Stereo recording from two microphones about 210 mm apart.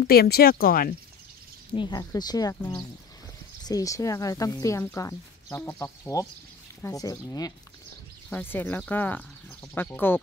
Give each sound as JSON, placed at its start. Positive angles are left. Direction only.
{"t": 0.0, "sound": "speech", "side_deg": 45}
{"t": 1.7, "sound": "speech", "side_deg": 20}